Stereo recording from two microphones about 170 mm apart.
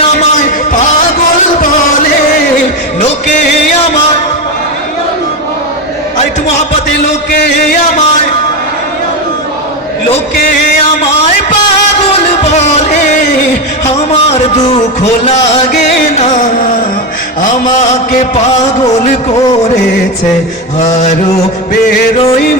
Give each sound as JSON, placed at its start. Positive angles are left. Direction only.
{"t": 7.3, "sound": "music", "side_deg": 65}
{"t": 12.4, "sound": "music", "side_deg": 40}
{"t": 16.1, "sound": "music", "side_deg": 45}
{"t": 20.7, "sound": "a sound", "side_deg": 45}